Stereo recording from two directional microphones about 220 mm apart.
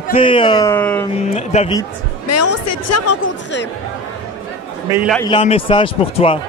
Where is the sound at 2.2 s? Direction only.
90° left; by 3.6 s 65° left (ahead or behind).